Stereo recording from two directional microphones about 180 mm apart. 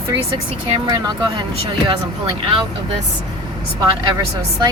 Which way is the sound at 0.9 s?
25° right (ahead or behind).